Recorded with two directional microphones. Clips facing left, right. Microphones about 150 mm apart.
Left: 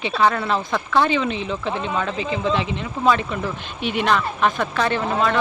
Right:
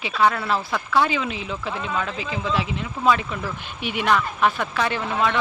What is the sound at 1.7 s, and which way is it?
Speech, 20° left (ahead or behind).